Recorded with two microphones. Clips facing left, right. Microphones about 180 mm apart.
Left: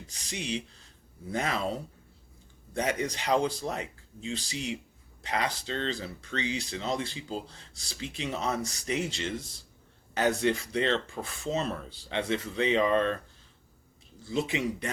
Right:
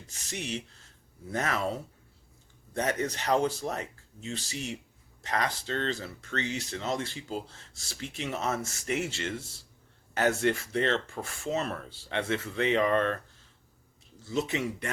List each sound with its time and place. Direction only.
0.1 s speech: 15° left (ahead or behind)
14.3 s speech: 10° left (ahead or behind)